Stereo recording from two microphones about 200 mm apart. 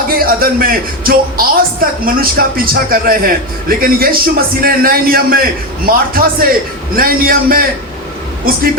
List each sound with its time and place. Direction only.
0.1 s a man's voice: 50° right (ahead or behind)